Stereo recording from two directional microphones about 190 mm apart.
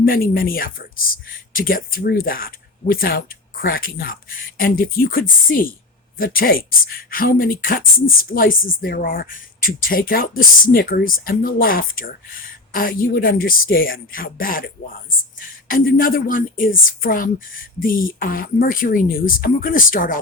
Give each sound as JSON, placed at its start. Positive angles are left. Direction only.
{"t": 0.0, "sound": "speech", "side_deg": 50}